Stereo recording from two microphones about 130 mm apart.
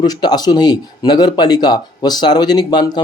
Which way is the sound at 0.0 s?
30° left (ahead or behind).